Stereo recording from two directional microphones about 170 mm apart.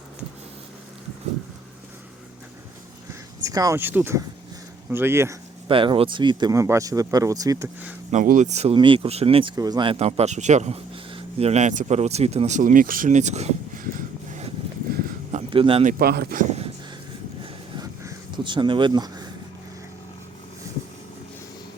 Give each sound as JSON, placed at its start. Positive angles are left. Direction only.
{"t": 3.4, "sound": "speech", "side_deg": -20}
{"t": 5.6, "sound": "speech", "side_deg": -30}
{"t": 8.1, "sound": "speech", "side_deg": -50}
{"t": 14.9, "sound": "a sound", "side_deg": -60}
{"t": 15.4, "sound": "speech", "side_deg": -30}
{"t": 15.8, "sound": "speech", "side_deg": -55}
{"t": 17.4, "sound": "a sound", "side_deg": -25}